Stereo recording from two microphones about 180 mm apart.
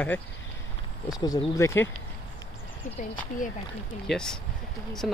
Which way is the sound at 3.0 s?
45° left (ahead or behind).